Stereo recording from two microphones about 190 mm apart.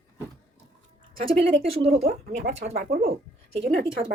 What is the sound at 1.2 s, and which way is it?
Speech, 30° right (ahead or behind).